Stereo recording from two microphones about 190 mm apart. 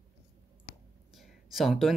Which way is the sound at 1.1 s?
Centre (ahead or behind).